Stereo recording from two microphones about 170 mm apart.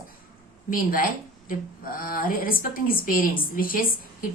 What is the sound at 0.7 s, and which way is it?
A woman's voice, 55° left (ahead or behind).